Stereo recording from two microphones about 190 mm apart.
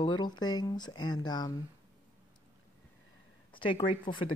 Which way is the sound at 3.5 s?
25° left (ahead or behind).